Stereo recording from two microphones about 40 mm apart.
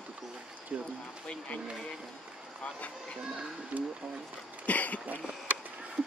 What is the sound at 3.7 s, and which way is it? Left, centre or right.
Speech, right.